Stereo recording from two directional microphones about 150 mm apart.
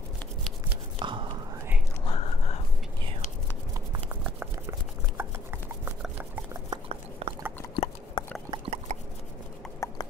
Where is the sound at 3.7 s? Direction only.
25° right (ahead or behind).